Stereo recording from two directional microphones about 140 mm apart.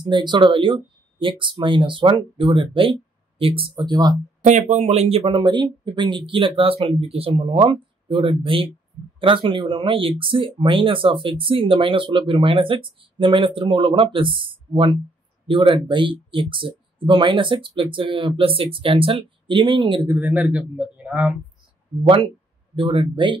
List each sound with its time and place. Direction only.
0.1 s speech: 35° right (ahead or behind)
4.5 s speech: 60° right (ahead or behind); by 20.1 s 35° right (ahead or behind)
20.1 s a man's voice: 10° right (ahead or behind)
22.0 s speech: 40° right (ahead or behind)